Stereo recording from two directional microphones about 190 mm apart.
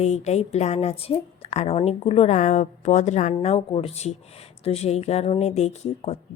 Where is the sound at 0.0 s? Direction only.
35° left (ahead or behind).